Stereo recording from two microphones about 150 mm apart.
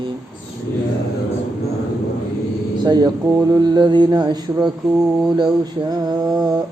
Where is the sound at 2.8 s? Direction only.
30° right (ahead or behind).